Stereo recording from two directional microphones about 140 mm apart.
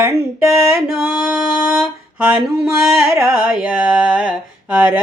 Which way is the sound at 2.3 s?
5° right (ahead or behind).